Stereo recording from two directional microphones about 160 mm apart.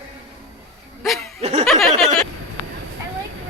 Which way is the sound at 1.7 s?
40° right (ahead or behind).